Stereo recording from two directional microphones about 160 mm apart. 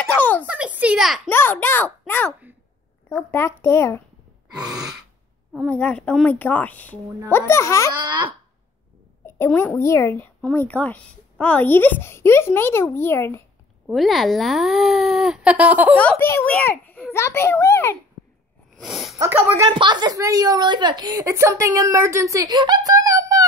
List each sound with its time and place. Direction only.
0.0 s a sound: 10° left (ahead or behind)
0.5 s a sound: 10° right (ahead or behind)
1.3 s speech: 15° left (ahead or behind)
5.5 s speech: 5° left (ahead or behind)
8.0 s a woman's voice: 30° right (ahead or behind)
9.2 s speech: 15° left (ahead or behind)
13.8 s a child's voice: centre (ahead or behind)
16.0 s a child's voice: 10° left (ahead or behind)
18.8 s speech: centre (ahead or behind)
19.1 s a woman's voice: 10° right (ahead or behind)
19.7 s a woman's voice: 30° right (ahead or behind)